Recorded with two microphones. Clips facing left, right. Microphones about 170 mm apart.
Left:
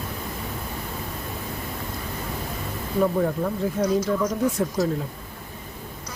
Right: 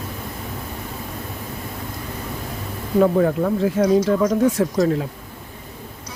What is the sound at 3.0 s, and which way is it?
Speech, 70° right (ahead or behind).